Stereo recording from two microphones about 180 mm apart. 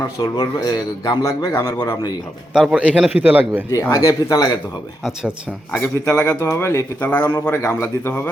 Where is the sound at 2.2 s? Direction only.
Centre (ahead or behind).